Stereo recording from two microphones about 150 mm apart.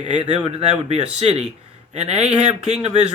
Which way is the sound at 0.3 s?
45° right (ahead or behind).